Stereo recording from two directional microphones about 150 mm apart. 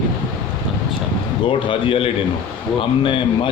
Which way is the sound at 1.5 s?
35° left (ahead or behind).